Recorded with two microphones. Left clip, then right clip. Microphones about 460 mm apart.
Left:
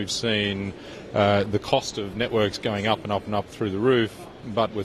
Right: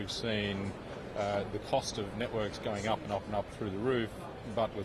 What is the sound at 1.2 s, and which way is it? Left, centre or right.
Speech, left.